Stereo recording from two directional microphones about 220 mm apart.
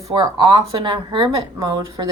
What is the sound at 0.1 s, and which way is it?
Speech, 20° right (ahead or behind).